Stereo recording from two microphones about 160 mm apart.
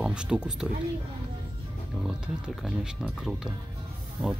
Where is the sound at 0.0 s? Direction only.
5° right (ahead or behind).